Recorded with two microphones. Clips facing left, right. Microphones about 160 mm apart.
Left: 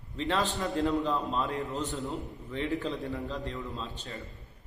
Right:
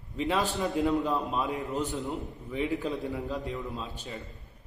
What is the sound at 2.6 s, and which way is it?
A man's voice, 15° right (ahead or behind).